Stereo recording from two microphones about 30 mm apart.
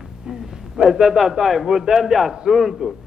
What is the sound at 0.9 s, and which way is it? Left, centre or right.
A man's voice, centre.